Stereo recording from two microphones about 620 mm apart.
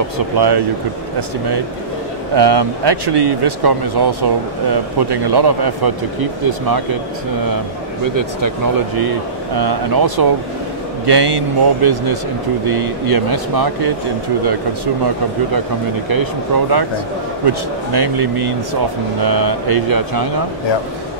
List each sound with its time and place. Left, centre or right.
0.4 s speech: right
2.3 s speech: right
8.9 s speech: right
16.1 s speech: right